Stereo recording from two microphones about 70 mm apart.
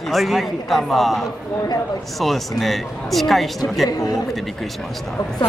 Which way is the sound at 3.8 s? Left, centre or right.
Left.